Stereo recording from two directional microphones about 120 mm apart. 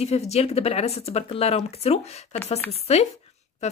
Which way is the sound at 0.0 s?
60° left (ahead or behind).